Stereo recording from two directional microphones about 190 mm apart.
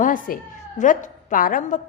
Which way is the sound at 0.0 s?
45° left (ahead or behind).